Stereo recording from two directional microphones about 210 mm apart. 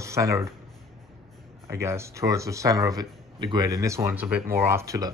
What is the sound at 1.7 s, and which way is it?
A man's voice, 15° right (ahead or behind).